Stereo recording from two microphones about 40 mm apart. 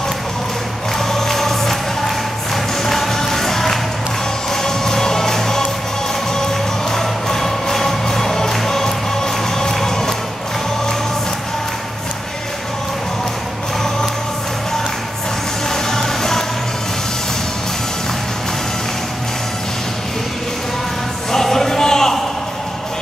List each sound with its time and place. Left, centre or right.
0.9 s music: centre
15.7 s vehicle: centre
21.3 s a sound: centre